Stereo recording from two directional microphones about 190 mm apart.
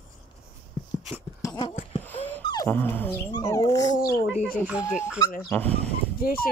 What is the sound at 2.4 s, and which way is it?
Dog, 25° left (ahead or behind).